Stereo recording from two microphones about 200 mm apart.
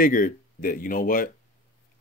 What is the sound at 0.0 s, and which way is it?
Speech, 45° left (ahead or behind).